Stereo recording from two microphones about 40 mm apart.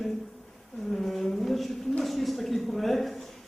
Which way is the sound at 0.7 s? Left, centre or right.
Centre.